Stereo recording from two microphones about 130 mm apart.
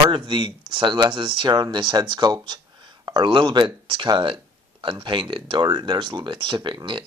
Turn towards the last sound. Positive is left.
turn(degrees=-35)  # may be behind; listen again after turning